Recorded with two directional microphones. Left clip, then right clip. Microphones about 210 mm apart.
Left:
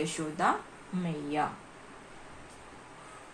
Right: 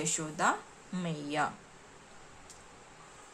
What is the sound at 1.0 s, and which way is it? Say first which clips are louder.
Speech: left 1 dB; 40° right (ahead or behind).